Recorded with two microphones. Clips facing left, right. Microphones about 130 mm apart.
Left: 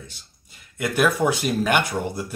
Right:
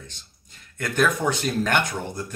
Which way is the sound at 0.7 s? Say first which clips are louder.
Left 2 dB; 10° left (ahead or behind).